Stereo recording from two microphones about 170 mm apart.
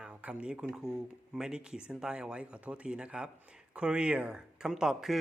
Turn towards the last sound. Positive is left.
turn(degrees=0)  # may be behind; listen again after turning